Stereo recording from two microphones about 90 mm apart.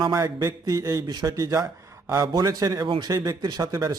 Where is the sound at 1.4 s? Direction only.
40° right (ahead or behind).